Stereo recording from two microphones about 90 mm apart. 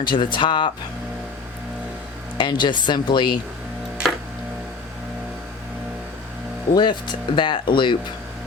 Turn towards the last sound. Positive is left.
turn(degrees=60)  # may be behind; listen again after turning